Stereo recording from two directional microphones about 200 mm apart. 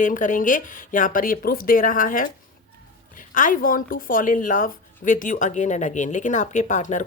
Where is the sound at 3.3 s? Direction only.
40° left (ahead or behind).